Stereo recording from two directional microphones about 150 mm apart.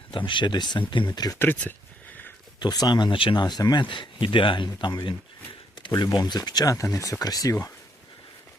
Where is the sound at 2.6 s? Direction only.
25° left (ahead or behind).